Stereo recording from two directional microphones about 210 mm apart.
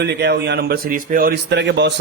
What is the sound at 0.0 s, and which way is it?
Speech, 55° right (ahead or behind).